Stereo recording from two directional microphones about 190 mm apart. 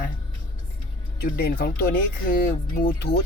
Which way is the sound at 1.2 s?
55° left (ahead or behind).